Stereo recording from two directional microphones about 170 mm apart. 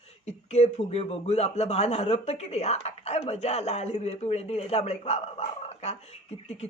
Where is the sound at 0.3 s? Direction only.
40° left (ahead or behind).